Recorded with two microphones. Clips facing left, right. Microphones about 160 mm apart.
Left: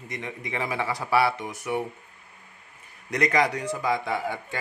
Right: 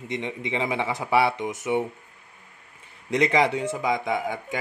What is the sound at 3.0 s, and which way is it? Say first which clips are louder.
Speech: right 2 dB; 25° right (ahead or behind).